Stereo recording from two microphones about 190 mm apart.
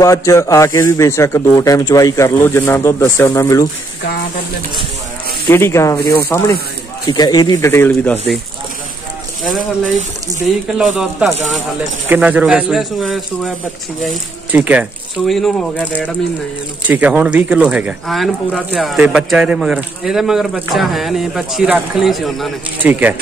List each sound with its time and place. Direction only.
0.0 s a man's voice: 15° left (ahead or behind)
5.5 s a man's voice: 15° left (ahead or behind)
9.4 s speech: centre (ahead or behind)